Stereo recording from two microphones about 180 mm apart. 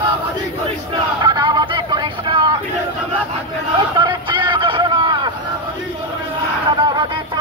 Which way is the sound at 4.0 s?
25° right (ahead or behind).